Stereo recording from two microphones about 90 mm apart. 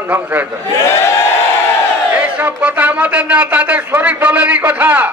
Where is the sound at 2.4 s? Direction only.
20° right (ahead or behind).